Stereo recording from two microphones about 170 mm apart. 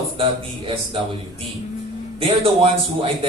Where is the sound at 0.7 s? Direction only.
30° right (ahead or behind).